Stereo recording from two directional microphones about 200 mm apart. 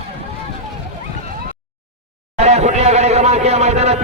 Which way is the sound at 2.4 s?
35° right (ahead or behind).